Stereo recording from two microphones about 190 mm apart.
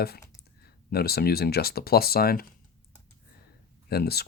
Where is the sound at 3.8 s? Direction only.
55° left (ahead or behind).